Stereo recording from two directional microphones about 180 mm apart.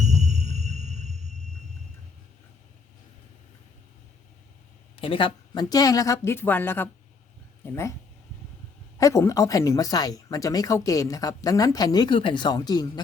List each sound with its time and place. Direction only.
0.0 s music: 40° right (ahead or behind)
4.9 s speech: 30° left (ahead or behind)
9.0 s speech: 15° left (ahead or behind)